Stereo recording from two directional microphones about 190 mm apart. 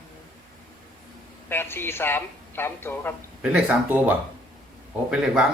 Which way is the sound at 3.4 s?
5° right (ahead or behind).